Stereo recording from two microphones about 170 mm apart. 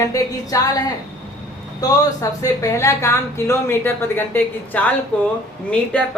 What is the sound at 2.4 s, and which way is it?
A woman's voice, 20° left (ahead or behind).